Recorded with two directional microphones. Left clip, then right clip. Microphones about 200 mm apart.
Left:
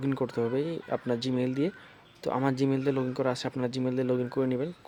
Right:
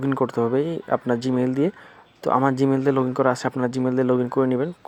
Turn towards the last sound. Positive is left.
turn(degrees=-15)  # may be behind; listen again after turning